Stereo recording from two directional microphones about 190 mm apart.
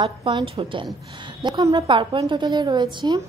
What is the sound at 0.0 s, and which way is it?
Speech, 25° right (ahead or behind).